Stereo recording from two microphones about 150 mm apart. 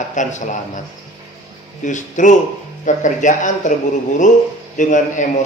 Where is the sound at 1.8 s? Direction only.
55° left (ahead or behind).